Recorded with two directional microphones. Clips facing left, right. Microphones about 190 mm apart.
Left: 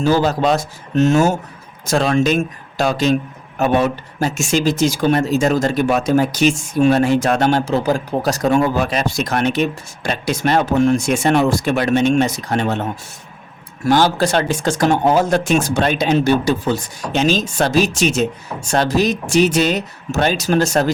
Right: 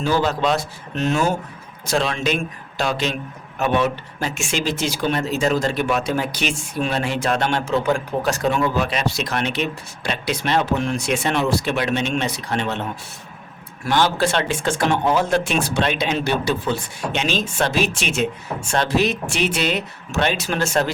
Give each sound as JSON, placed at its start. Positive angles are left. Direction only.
{"t": 0.0, "sound": "speech", "side_deg": 40}
{"t": 13.8, "sound": "speech", "side_deg": 40}